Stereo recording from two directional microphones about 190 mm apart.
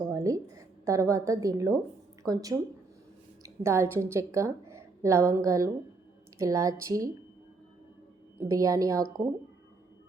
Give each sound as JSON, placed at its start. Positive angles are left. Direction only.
{"t": 0.1, "sound": "a woman's voice", "side_deg": -15}
{"t": 8.4, "sound": "a woman's voice", "side_deg": -15}